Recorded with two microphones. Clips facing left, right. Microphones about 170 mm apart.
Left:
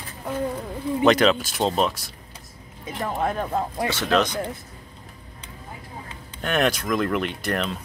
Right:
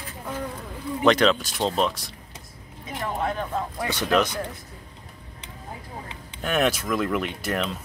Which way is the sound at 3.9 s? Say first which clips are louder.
Even; 10° right (ahead or behind).